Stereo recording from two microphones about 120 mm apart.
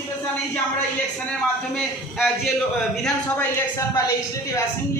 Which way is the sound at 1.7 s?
Centre (ahead or behind).